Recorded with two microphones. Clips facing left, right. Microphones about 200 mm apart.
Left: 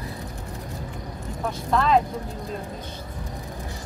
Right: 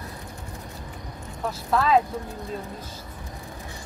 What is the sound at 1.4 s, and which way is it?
Speech, 5° right (ahead or behind).